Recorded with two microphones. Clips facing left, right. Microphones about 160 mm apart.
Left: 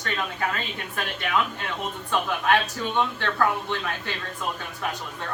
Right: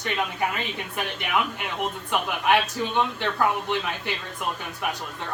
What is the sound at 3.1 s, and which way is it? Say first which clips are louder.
Speech: even; 15° right (ahead or behind).